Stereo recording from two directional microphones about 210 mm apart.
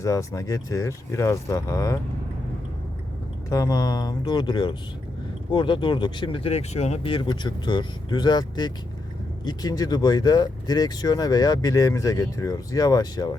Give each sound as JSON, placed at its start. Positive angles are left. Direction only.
{"t": 0.0, "sound": "speech", "side_deg": 15}
{"t": 3.5, "sound": "speech", "side_deg": 15}